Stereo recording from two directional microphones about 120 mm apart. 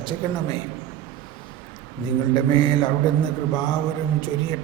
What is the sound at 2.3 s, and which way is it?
Speech, 40° left (ahead or behind).